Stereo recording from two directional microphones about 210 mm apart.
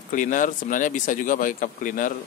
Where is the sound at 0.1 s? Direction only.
40° left (ahead or behind).